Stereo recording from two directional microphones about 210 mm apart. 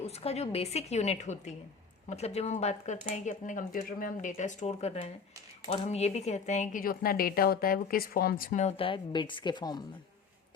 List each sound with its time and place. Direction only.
0.0 s speech: 30° left (ahead or behind)